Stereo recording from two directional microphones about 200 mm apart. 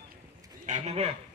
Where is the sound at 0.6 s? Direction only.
35° right (ahead or behind).